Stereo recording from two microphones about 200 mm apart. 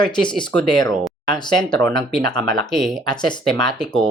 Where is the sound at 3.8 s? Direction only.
5° left (ahead or behind).